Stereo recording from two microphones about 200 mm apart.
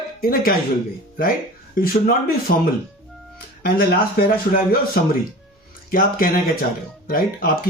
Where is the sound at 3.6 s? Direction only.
50° left (ahead or behind).